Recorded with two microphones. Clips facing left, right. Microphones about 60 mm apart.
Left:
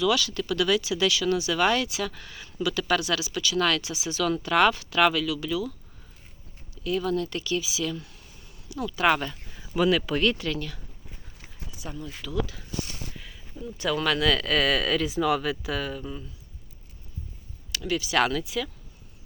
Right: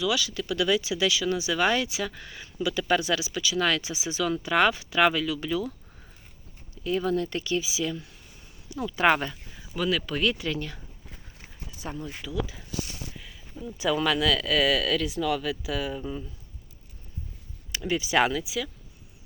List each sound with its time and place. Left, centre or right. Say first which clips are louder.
0.0 s speech: left 3 dB; centre; by 5.7 s right
6.8 s speech: even; right
9.3 s a sound: even; centre
9.7 s speech: left 4 dB; centre
10.4 s speech: even; right
11.8 s speech: right 2 dB; right
13.1 s a sound: even; centre
13.7 s speech: right 1 dB; centre
15.9 s speech: right 2 dB; centre
17.7 s speech: right 1 dB; right
18.3 s speech: left 1 dB; centre